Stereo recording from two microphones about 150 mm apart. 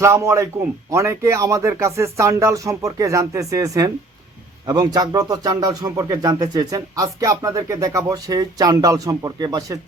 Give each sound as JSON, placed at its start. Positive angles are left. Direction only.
{"t": 0.0, "sound": "a man's voice", "side_deg": -20}